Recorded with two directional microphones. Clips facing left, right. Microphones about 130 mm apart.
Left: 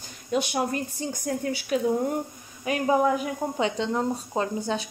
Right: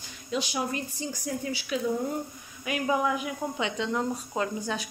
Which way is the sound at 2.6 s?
35° left (ahead or behind).